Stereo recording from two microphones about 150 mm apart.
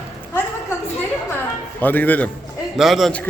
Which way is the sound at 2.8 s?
Centre (ahead or behind).